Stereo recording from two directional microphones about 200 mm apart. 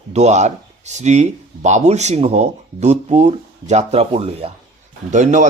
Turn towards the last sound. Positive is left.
turn(degrees=-40)  # may be behind; listen again after turning